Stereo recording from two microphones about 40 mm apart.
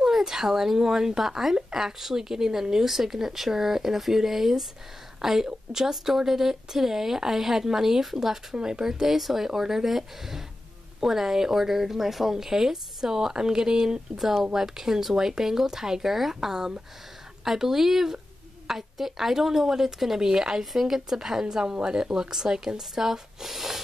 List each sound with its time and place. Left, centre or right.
0.0 s speech: centre